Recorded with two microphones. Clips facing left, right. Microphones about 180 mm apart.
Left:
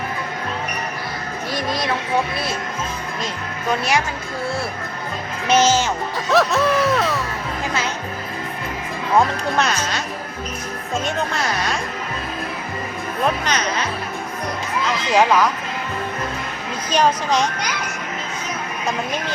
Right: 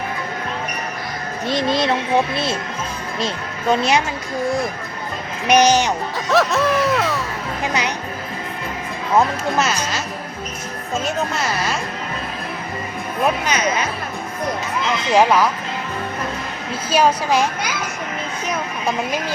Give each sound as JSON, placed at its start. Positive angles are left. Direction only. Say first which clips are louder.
{"t": 1.5, "sound": "a woman's voice", "louder": "right 5 dB", "side_deg": -25}
{"t": 6.2, "sound": "music", "louder": "even", "side_deg": 0}
{"t": 7.6, "sound": "a child's voice", "louder": "right 3 dB", "side_deg": -15}
{"t": 9.1, "sound": "music", "louder": "right 1 dB", "side_deg": -5}
{"t": 13.2, "sound": "a child's voice", "louder": "right 2 dB", "side_deg": -10}
{"t": 15.1, "sound": "a child's voice", "louder": "right 1 dB", "side_deg": -10}
{"t": 16.9, "sound": "a child's voice", "louder": "right 2 dB", "side_deg": -5}